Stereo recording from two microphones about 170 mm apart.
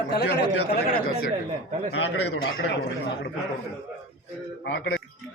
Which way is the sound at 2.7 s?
65° left (ahead or behind).